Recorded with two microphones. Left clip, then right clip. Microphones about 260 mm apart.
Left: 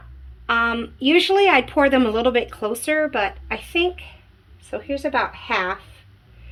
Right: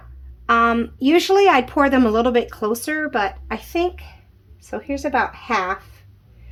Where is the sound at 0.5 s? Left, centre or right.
Right.